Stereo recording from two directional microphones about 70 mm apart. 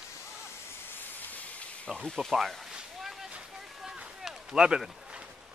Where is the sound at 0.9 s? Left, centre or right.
Left.